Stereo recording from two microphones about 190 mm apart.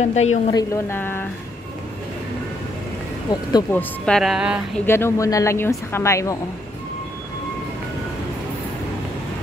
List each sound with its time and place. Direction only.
0.0 s a woman's voice: 35° left (ahead or behind)
0.5 s speech: 15° left (ahead or behind)
3.7 s speech: 5° left (ahead or behind)
4.8 s speech: 15° left (ahead or behind)